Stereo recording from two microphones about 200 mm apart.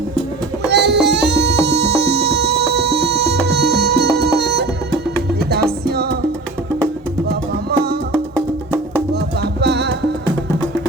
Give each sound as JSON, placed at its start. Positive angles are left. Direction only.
{"t": 0.7, "sound": "music", "side_deg": -55}
{"t": 5.9, "sound": "music", "side_deg": -50}
{"t": 9.4, "sound": "music", "side_deg": -55}